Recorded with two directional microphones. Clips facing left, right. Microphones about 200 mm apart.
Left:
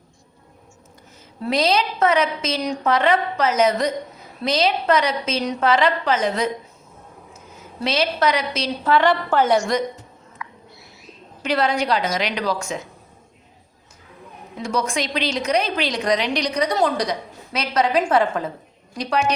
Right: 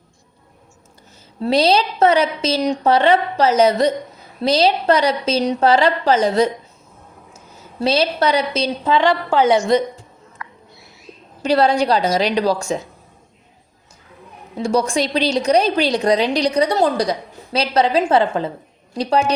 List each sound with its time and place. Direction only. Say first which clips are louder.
1.4 s a woman's voice: right 4 dB; 30° right (ahead or behind)
7.8 s a woman's voice: right 4 dB; 30° right (ahead or behind)
8.8 s a woman's voice: even; 15° right (ahead or behind)
10.4 s owl: even; centre (ahead or behind)
11.4 s a woman's voice: right 5 dB; 30° right (ahead or behind)
14.5 s a woman's voice: right 6 dB; 30° right (ahead or behind)